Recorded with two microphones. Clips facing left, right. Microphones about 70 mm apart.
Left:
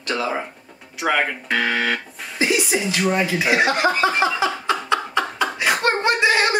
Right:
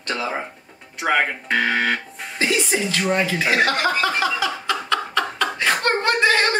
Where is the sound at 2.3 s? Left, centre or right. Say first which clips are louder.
Left 1 dB; centre.